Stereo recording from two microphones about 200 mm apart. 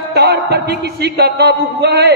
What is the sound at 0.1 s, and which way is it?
A man's voice, 55° right (ahead or behind).